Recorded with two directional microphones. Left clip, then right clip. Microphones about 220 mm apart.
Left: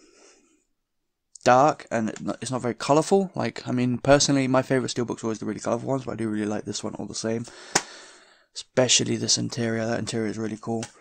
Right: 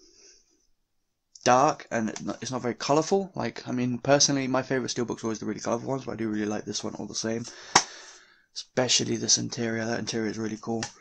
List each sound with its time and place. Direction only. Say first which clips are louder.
1.4 s speech: left 3 dB; 50° left (ahead or behind)